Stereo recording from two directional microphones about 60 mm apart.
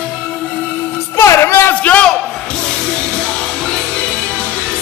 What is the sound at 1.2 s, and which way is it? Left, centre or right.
Music, left.